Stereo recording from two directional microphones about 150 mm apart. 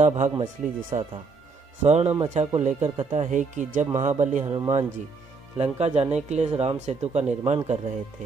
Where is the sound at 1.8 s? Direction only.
45° right (ahead or behind).